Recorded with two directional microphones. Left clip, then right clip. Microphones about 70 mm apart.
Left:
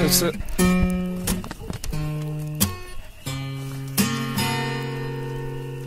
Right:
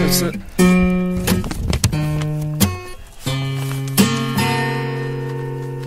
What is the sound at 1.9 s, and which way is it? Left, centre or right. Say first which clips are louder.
Music: right 8 dB; right.